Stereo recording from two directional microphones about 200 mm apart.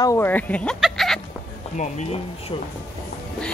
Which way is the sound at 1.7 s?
35° left (ahead or behind).